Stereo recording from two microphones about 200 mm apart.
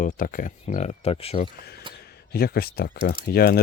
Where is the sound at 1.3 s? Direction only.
50° left (ahead or behind).